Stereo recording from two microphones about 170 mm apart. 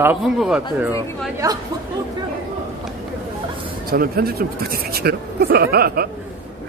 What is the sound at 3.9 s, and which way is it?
Speech, 60° right (ahead or behind).